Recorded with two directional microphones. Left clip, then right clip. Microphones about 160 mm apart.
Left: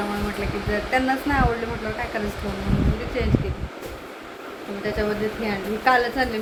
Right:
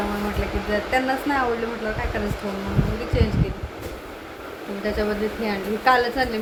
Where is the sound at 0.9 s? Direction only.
5° left (ahead or behind).